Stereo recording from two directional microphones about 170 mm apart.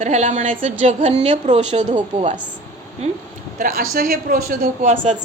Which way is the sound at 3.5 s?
60° right (ahead or behind).